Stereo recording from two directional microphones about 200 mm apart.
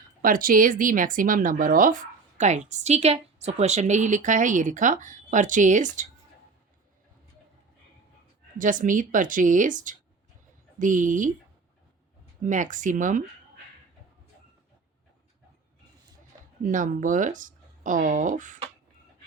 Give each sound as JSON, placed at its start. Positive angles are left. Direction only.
{"t": 0.2, "sound": "a woman's voice", "side_deg": -45}
{"t": 8.5, "sound": "a woman's voice", "side_deg": -40}
{"t": 12.4, "sound": "a woman's voice", "side_deg": -40}
{"t": 16.6, "sound": "a woman's voice", "side_deg": -40}